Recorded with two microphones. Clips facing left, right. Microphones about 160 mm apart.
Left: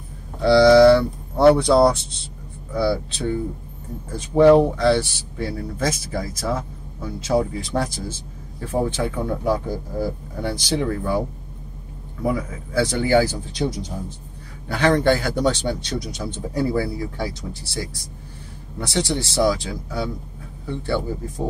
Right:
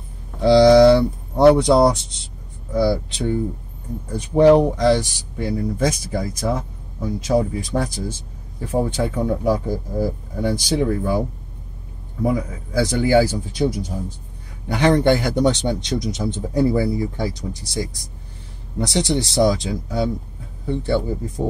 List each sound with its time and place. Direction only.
0.4 s a man's voice: 20° right (ahead or behind)